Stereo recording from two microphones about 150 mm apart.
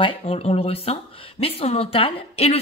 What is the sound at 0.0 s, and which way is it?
Speech, 40° left (ahead or behind).